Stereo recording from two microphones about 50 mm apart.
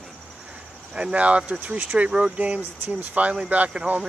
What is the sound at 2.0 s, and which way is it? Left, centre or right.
Speech, centre.